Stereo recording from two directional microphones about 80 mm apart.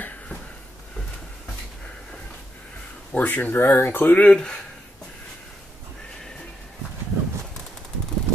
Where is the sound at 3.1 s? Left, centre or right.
Left.